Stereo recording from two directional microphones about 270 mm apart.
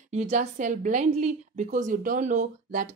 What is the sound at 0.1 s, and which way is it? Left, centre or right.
A woman's voice, right.